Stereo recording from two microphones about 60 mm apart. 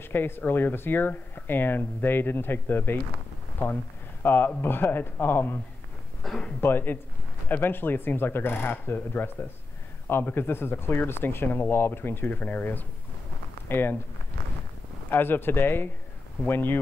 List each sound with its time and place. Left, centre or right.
0.0 s speech: left
4.2 s speech: left
6.2 s speech: centre
6.6 s speech: left
15.0 s speech: left